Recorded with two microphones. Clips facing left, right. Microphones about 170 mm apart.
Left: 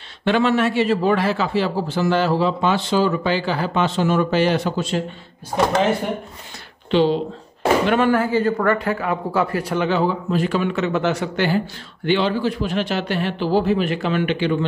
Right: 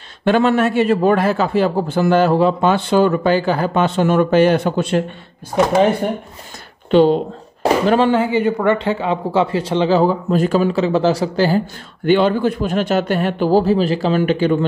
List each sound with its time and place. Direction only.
0.2 s a man's voice: 45° right (ahead or behind)
6.9 s speech: 50° right (ahead or behind)
7.6 s a sound: 35° right (ahead or behind)
8.1 s speech: 20° right (ahead or behind); by 11.6 s 35° right (ahead or behind)
12.1 s a man's voice: 50° right (ahead or behind)